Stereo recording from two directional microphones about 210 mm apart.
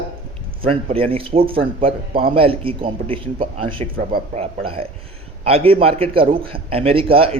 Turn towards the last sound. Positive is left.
turn(degrees=-25)  # may be behind; listen again after turning